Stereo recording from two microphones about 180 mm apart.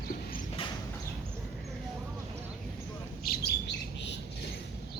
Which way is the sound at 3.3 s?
65° left (ahead or behind).